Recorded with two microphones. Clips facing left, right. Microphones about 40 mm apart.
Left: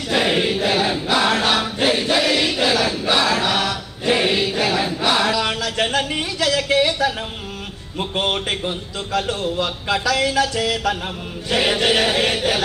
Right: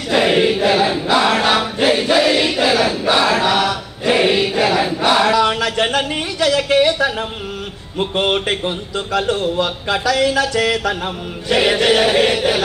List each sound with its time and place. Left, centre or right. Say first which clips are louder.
0.1 s choir: right 5 dB; centre
1.1 s chant: right 3 dB; centre
4.6 s choir: right 4 dB; centre
5.6 s a sound: right 3 dB; right
8.0 s speech: right 4 dB; right
11.4 s chant: right 4 dB; centre